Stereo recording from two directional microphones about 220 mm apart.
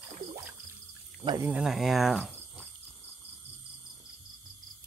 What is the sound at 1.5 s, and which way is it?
Speech, centre (ahead or behind).